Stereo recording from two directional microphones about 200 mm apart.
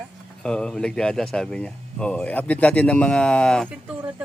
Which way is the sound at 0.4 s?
5° left (ahead or behind).